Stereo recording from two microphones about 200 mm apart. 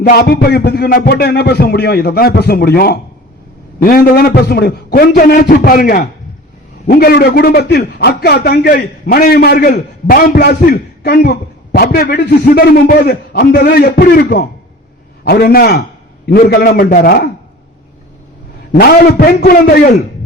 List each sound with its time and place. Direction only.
0.0 s a man's voice: 50° left (ahead or behind)
18.7 s a man's voice: 50° left (ahead or behind)